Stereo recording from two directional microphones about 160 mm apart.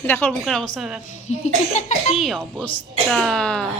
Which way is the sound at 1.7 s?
50° left (ahead or behind).